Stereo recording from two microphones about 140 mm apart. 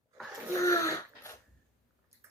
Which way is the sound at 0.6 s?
20° left (ahead or behind).